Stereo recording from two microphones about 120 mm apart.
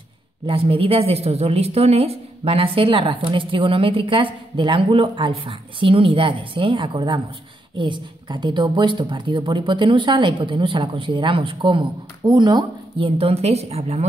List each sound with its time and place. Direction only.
0.5 s a woman's voice: 50° right (ahead or behind)